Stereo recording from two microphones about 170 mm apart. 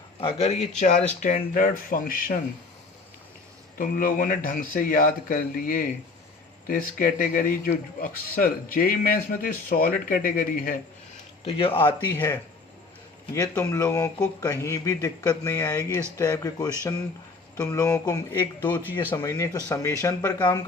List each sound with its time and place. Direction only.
0.2 s speech: 35° left (ahead or behind); by 2.4 s 55° left (ahead or behind)
3.8 s speech: 55° left (ahead or behind)
11.4 s speech: 30° left (ahead or behind)
12.1 s speech: 15° left (ahead or behind)
13.6 s speech: 15° left (ahead or behind)